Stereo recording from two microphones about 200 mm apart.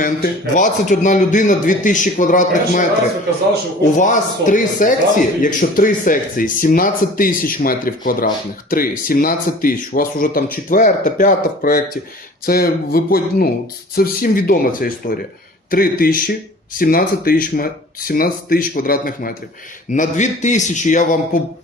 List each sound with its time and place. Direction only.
0.0 s a man's voice: 40° left (ahead or behind)
3.9 s a man's voice: 40° left (ahead or behind)